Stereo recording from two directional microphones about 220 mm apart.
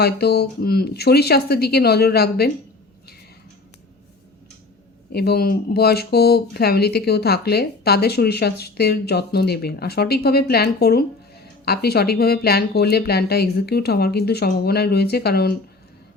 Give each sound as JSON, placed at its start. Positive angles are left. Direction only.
{"t": 0.0, "sound": "speech", "side_deg": 45}
{"t": 5.1, "sound": "speech", "side_deg": 45}